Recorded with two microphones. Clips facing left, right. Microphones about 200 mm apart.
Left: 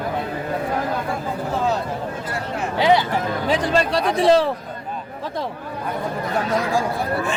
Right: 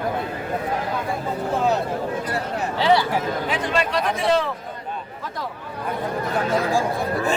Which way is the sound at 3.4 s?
35° left (ahead or behind).